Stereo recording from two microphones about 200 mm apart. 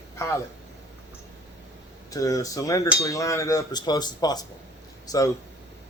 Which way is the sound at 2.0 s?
15° left (ahead or behind).